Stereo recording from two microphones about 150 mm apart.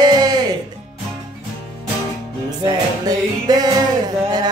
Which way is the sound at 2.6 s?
25° right (ahead or behind).